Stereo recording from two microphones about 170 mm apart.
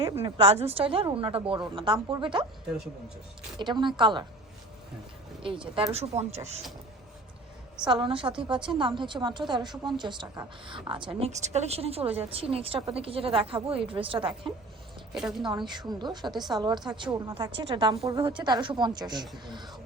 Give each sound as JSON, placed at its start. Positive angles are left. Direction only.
{"t": 0.0, "sound": "a woman's voice", "side_deg": -35}
{"t": 3.6, "sound": "a woman's voice", "side_deg": -25}
{"t": 5.4, "sound": "a woman's voice", "side_deg": -30}
{"t": 8.0, "sound": "a woman's voice", "side_deg": -30}
{"t": 15.1, "sound": "a woman's voice", "side_deg": 0}
{"t": 15.4, "sound": "a woman's voice", "side_deg": -25}